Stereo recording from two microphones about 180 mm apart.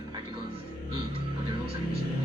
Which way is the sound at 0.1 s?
25° right (ahead or behind).